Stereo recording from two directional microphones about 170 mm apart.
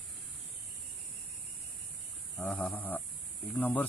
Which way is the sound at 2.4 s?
10° left (ahead or behind).